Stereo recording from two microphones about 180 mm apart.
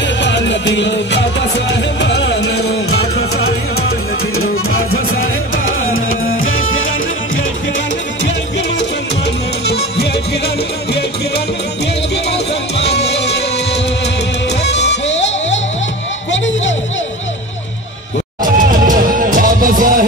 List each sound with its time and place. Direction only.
0.0 s music: 80° left
5.7 s music: 90° left
8.2 s music: 75° left (ahead or behind); by 16.7 s 90° left
18.4 s music: 50° right (ahead or behind)